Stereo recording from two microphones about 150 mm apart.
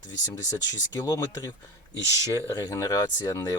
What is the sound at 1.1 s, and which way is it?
Speech, 25° left (ahead or behind).